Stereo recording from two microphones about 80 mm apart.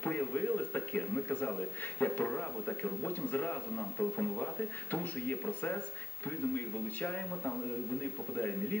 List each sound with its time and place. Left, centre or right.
0.0 s speech: left